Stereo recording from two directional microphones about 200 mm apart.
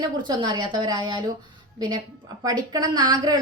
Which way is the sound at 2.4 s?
20° right (ahead or behind).